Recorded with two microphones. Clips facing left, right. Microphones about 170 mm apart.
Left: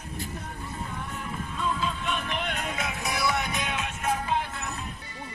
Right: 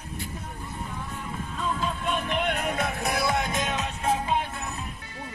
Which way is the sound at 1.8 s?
45° right (ahead or behind).